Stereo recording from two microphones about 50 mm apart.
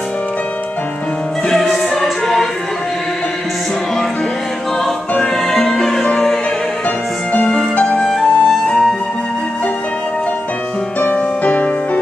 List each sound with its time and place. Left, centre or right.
1.5 s music: centre
5.2 s music: centre
7.4 s music: centre
8.1 s music: centre
8.6 s flute: centre
11.0 s music: left